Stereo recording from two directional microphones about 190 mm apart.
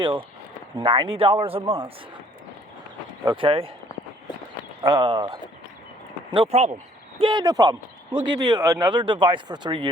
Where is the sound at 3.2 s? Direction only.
25° right (ahead or behind).